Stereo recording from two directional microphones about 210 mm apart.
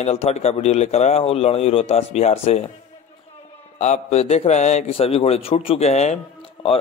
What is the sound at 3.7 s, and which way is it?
A man's voice, 30° left (ahead or behind).